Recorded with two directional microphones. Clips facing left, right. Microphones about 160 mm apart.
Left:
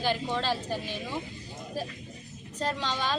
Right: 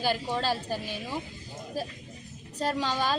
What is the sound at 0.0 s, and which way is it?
Speech, 10° right (ahead or behind).